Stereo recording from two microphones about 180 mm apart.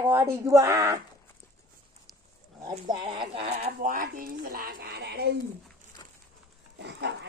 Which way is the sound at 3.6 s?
50° right (ahead or behind).